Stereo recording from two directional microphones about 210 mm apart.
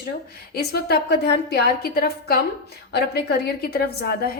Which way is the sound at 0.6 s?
50° left (ahead or behind).